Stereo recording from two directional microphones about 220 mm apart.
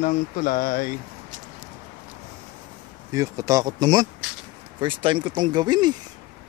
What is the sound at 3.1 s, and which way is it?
Speech, 15° right (ahead or behind).